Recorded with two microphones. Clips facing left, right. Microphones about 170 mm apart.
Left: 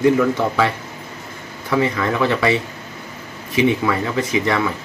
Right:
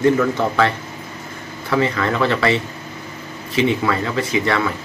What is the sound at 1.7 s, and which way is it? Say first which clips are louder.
Speech: even; 15° left (ahead or behind).